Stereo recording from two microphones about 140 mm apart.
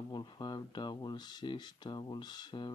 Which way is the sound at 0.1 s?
30° left (ahead or behind).